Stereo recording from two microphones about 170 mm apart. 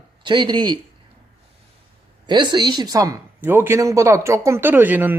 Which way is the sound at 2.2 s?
25° right (ahead or behind).